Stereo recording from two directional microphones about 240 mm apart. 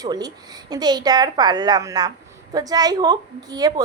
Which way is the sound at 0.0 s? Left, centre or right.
Centre.